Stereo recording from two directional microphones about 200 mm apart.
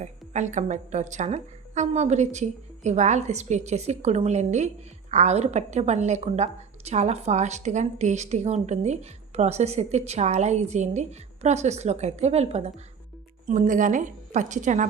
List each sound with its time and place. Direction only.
0.0 s a woman's voice: 35° right (ahead or behind)